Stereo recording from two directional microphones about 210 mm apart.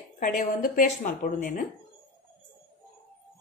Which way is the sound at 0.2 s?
40° left (ahead or behind).